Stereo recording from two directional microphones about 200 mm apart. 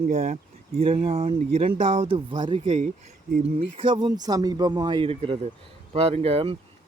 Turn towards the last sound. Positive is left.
turn(degrees=-30)  # may be behind; listen again after turning